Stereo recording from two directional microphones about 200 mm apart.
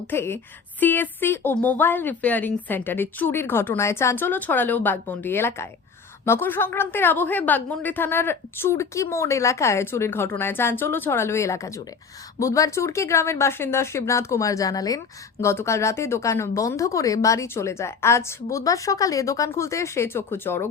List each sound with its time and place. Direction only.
0.1 s speech: 10° left (ahead or behind)